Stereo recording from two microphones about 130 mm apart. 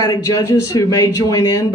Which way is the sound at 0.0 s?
25° left (ahead or behind).